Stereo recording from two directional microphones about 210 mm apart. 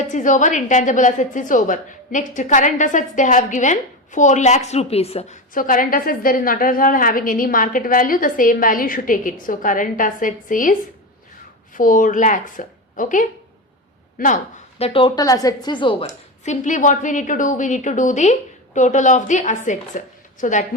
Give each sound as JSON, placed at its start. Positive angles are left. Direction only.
{"t": 0.0, "sound": "a woman's voice", "side_deg": 35}